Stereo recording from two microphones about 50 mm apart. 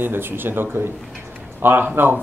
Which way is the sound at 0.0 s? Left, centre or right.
Right.